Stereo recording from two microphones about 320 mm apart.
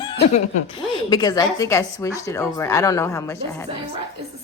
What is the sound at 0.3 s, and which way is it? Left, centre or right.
A woman's voice, centre.